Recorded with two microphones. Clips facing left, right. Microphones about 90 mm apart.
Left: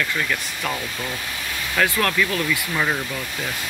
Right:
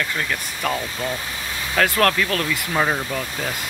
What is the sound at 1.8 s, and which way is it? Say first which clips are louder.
Speech: right 2 dB; 45° right (ahead or behind).